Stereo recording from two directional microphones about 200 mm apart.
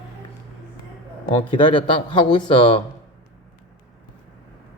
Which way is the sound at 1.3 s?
25° left (ahead or behind).